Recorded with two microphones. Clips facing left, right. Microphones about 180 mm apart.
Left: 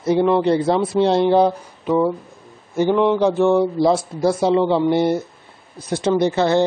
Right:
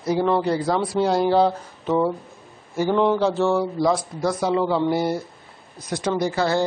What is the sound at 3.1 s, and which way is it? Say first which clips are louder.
Speech: left 5 dB; 15° left (ahead or behind).